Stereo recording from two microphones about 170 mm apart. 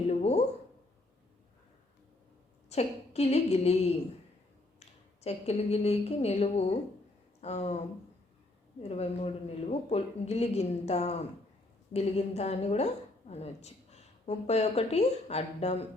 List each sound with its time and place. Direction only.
0.1 s a sound: 40° left (ahead or behind)
2.6 s a woman's voice: 40° left (ahead or behind)
4.8 s a woman's voice: 40° left (ahead or behind)
8.8 s a woman's voice: 35° left (ahead or behind)